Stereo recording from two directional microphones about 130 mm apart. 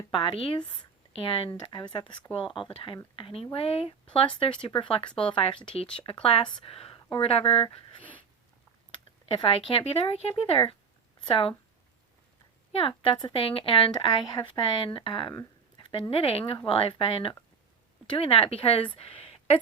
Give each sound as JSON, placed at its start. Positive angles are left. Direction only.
{"t": 0.1, "sound": "speech", "side_deg": 40}
{"t": 1.7, "sound": "speech", "side_deg": 35}
{"t": 9.4, "sound": "speech", "side_deg": 45}
{"t": 12.7, "sound": "speech", "side_deg": 45}
{"t": 15.3, "sound": "a sound", "side_deg": 25}
{"t": 15.9, "sound": "speech", "side_deg": 45}